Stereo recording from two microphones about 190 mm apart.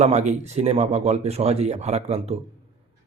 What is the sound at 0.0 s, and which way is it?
Speech, 40° right (ahead or behind).